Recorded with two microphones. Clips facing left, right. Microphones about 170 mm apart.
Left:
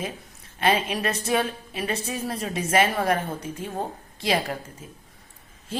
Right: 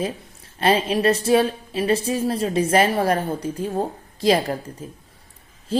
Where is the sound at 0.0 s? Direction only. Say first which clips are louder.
Right 6 dB; 35° right (ahead or behind).